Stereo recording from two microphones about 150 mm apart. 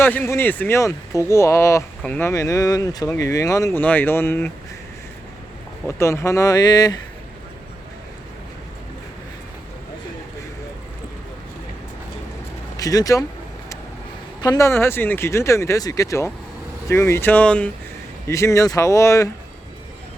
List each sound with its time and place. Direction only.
0.0 s speech: 15° left (ahead or behind)
2.3 s speech: 25° left (ahead or behind)
6.0 s speech: 20° left (ahead or behind)
12.7 s speech: 25° left (ahead or behind)
14.4 s speech: 25° left (ahead or behind)
18.3 s speech: 20° left (ahead or behind)